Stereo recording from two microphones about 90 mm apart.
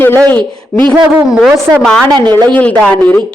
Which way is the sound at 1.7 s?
10° left (ahead or behind).